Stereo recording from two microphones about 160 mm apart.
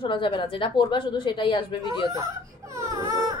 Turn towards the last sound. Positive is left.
turn(degrees=-20)  # may be behind; listen again after turning